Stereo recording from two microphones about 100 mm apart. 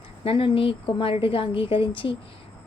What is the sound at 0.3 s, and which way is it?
A woman's voice, 65° left (ahead or behind).